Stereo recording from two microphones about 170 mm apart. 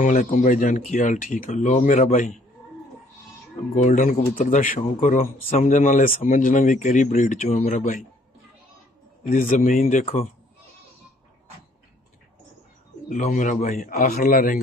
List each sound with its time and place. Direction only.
0.0 s speech: 50° left (ahead or behind)
3.7 s speech: 50° left (ahead or behind)
9.2 s speech: 50° left (ahead or behind)
13.1 s speech: 50° left (ahead or behind)